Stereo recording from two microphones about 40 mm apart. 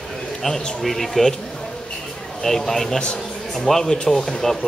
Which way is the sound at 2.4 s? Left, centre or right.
Centre.